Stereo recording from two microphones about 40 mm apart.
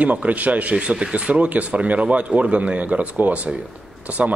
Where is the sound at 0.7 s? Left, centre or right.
Right.